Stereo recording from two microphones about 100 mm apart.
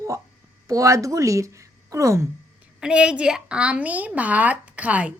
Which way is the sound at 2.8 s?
10° right (ahead or behind).